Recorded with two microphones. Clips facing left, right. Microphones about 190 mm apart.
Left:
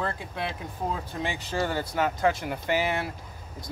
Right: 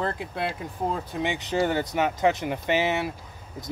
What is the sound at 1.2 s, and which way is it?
Speech, 20° right (ahead or behind).